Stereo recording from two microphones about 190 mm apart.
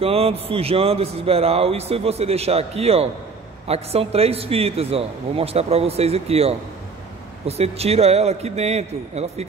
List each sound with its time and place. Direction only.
0.0 s a man's voice: 30° right (ahead or behind)